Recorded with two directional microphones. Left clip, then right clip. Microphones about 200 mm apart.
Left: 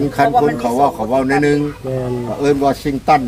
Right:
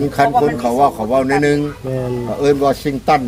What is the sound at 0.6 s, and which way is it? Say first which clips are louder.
Speech: right 1 dB; 40° right (ahead or behind).